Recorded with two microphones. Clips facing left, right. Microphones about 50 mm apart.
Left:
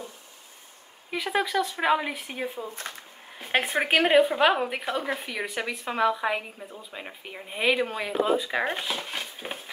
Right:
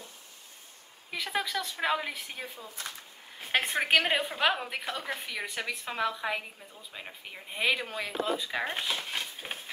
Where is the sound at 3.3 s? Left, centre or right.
Centre.